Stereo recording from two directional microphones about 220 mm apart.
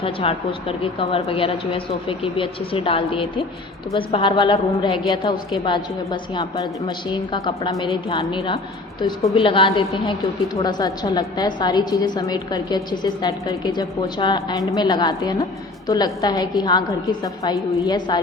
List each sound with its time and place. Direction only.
0.0 s a woman's voice: 25° left (ahead or behind)